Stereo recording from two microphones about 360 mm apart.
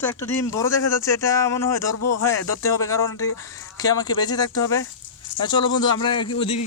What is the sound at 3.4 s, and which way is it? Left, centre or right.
Speech, centre.